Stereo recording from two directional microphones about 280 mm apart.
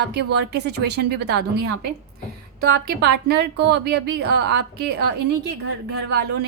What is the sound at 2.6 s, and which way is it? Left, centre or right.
Speech, right.